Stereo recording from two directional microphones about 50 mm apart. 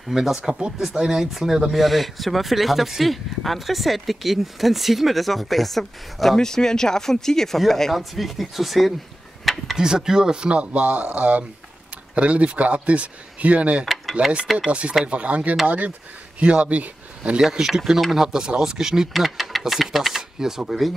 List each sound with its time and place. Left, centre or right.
0.1 s speech: centre
9.4 s a sound: centre
9.8 s speech: centre
17.4 s speech: centre